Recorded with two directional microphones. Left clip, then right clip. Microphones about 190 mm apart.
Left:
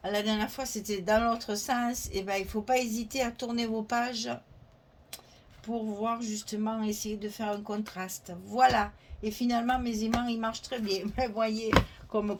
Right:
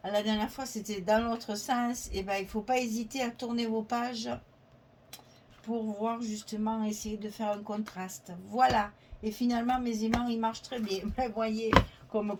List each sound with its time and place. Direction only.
0.0 s speech: 45° left (ahead or behind)
5.6 s speech: 45° left (ahead or behind)
8.5 s speech: 45° left (ahead or behind)